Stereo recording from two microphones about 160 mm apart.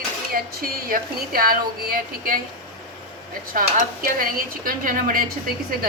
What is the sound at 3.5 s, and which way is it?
A woman's voice, 60° right (ahead or behind).